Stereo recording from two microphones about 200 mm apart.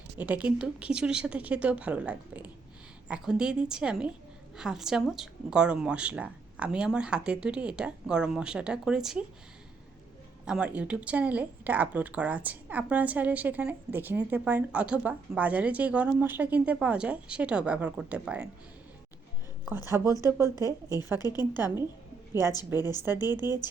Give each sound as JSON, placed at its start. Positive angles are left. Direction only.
{"t": 0.2, "sound": "speech", "side_deg": -5}
{"t": 10.4, "sound": "speech", "side_deg": -5}
{"t": 19.8, "sound": "a woman's voice", "side_deg": 20}
{"t": 21.5, "sound": "speech", "side_deg": -10}
{"t": 23.1, "sound": "speech", "side_deg": -10}
{"t": 23.4, "sound": "a woman's voice", "side_deg": 20}